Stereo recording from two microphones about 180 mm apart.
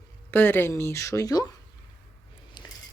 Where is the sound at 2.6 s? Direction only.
25° left (ahead or behind).